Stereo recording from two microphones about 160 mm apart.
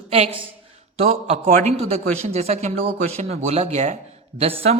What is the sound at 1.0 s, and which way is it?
Speech, 40° right (ahead or behind).